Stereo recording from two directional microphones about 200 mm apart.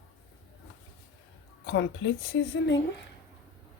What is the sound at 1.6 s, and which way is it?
Speech, 60° left (ahead or behind).